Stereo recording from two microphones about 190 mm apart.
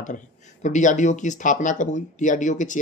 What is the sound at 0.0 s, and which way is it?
Speech, 40° left (ahead or behind).